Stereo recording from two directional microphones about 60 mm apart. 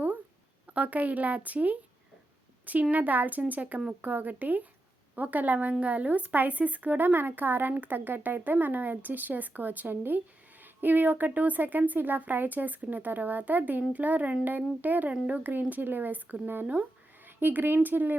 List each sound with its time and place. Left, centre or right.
0.7 s speech: right
2.9 s speech: right